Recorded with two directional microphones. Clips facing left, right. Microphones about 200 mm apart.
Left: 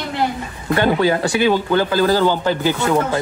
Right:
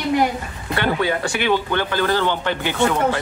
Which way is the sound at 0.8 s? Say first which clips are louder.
Left 4 dB; 40° left (ahead or behind).